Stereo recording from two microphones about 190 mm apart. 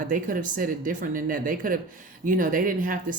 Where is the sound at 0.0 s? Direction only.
45° right (ahead or behind).